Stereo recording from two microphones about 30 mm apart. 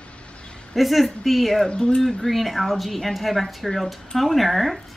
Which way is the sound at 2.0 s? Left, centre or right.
Centre.